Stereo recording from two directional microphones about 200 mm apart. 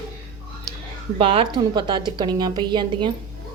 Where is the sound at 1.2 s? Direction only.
30° right (ahead or behind).